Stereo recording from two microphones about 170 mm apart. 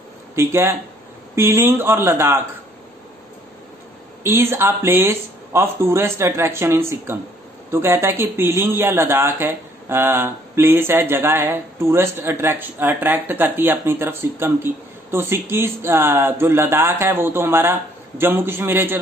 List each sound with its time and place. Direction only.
0.4 s speech: 15° right (ahead or behind)
4.2 s speech: 15° right (ahead or behind)